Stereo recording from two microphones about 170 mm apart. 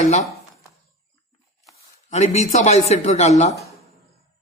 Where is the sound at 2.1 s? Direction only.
40° left (ahead or behind).